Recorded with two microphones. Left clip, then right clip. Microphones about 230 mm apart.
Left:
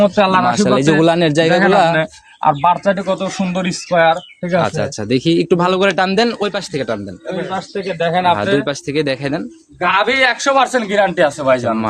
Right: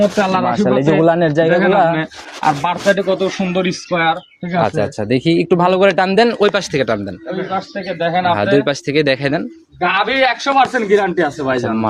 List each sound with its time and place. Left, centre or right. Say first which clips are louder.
0.0 s speech: left 2 dB; left
0.6 s a man's voice: even; centre; by 4.2 s left
4.6 s speech: right 2 dB; centre
6.4 s speech: right 5 dB; right
7.9 s speech: left 1 dB; left
8.5 s speech: right 3 dB; centre
9.8 s speech: left 1 dB; left
11.4 s a man's voice: left 4 dB; left